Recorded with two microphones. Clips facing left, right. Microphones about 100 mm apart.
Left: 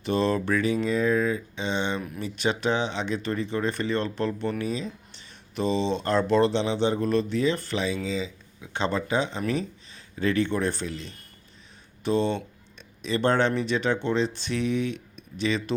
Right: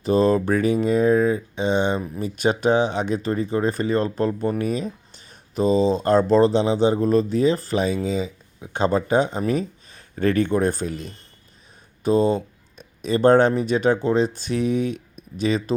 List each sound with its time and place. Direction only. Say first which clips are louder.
0.0 s speech: right 6 dB; 40° right (ahead or behind)